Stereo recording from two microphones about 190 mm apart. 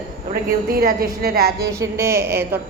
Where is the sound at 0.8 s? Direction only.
55° right (ahead or behind).